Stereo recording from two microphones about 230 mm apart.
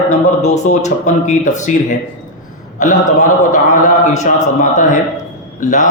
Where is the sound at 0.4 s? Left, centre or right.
Left.